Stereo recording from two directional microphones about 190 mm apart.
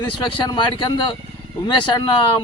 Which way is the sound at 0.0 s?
25° left (ahead or behind).